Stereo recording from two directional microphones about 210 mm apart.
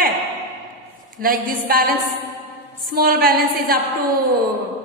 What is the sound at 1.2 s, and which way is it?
A woman's voice, 45° right (ahead or behind).